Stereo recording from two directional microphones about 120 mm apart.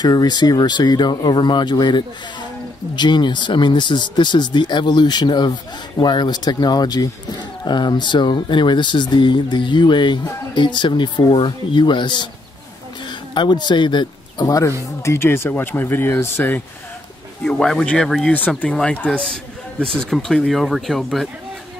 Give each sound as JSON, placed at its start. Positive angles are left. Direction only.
{"t": 0.0, "sound": "speech", "side_deg": 35}
{"t": 15.0, "sound": "speech", "side_deg": 20}
{"t": 17.4, "sound": "speech", "side_deg": 5}